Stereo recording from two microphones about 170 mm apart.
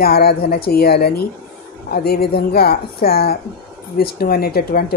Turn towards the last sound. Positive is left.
turn(degrees=65)  # may be behind; listen again after turning